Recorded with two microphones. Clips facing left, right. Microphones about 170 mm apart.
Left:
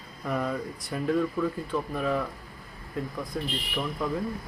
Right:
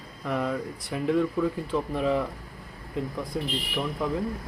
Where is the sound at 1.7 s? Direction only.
25° right (ahead or behind).